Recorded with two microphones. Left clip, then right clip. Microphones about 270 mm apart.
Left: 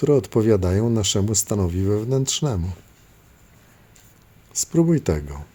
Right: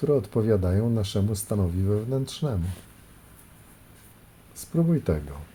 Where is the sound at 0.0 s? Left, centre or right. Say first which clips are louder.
Left 6 dB; left.